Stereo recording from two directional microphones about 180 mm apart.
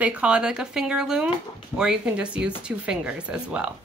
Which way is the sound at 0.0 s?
5° right (ahead or behind).